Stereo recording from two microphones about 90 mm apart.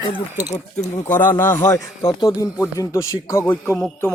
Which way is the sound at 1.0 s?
20° left (ahead or behind).